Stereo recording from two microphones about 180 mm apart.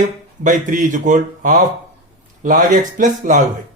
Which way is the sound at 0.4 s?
45° right (ahead or behind).